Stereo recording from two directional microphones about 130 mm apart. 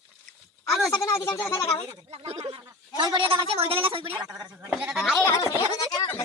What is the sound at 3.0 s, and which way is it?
A woman's voice, 35° right (ahead or behind).